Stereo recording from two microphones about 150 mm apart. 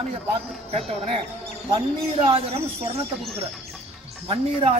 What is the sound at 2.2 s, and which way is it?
Speech, 40° right (ahead or behind).